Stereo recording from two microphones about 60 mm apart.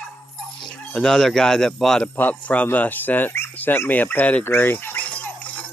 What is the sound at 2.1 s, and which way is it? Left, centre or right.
Speech, left.